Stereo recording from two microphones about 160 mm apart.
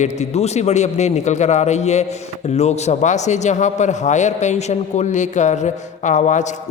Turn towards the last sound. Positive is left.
turn(degrees=50)  # may be behind; listen again after turning